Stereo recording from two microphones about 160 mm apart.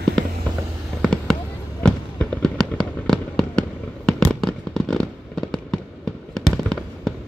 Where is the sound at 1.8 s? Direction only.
5° left (ahead or behind).